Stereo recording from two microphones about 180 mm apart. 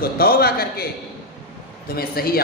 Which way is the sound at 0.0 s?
55° left (ahead or behind).